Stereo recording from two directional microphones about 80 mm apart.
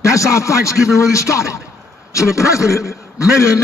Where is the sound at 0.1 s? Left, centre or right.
Left.